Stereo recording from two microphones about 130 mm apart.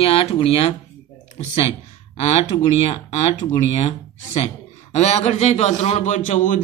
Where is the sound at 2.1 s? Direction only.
55° left (ahead or behind).